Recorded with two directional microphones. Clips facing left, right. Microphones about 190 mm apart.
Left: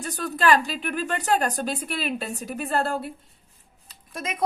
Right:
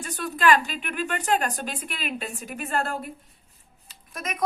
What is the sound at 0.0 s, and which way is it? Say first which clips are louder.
A woman's voice: even; 40° left (ahead or behind).